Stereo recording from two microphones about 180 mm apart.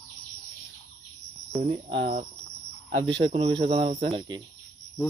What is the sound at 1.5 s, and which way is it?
Cricket, 35° right (ahead or behind).